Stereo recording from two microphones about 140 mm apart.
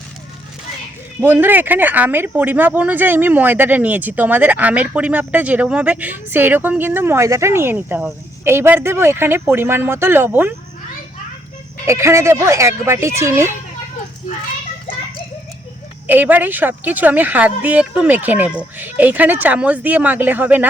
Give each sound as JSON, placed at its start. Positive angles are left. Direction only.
{"t": 1.2, "sound": "speech", "side_deg": -15}
{"t": 11.9, "sound": "speech", "side_deg": -20}
{"t": 16.0, "sound": "speech", "side_deg": -15}